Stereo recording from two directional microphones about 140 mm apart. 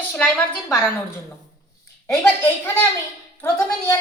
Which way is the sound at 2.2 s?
15° left (ahead or behind).